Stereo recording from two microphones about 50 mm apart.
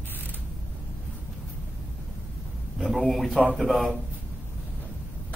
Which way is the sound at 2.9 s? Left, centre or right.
Centre.